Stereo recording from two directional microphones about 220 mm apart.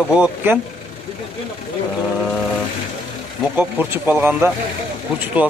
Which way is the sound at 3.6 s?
5° right (ahead or behind).